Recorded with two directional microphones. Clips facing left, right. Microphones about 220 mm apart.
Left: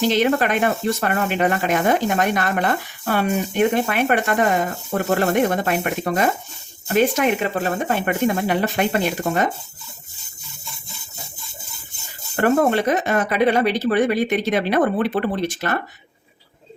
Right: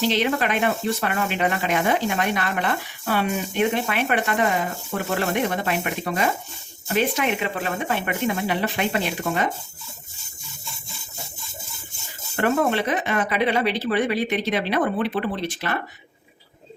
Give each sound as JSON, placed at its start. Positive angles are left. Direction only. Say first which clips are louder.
{"t": 0.0, "sound": "speech", "louder": "left 4 dB", "side_deg": 45}
{"t": 12.4, "sound": "speech", "louder": "left 4 dB", "side_deg": 45}